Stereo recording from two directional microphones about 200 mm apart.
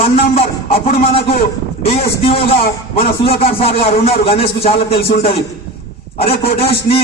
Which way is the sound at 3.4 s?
30° left (ahead or behind).